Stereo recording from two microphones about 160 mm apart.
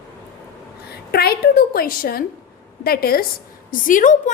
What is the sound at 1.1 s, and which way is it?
A woman's voice, 75° left (ahead or behind).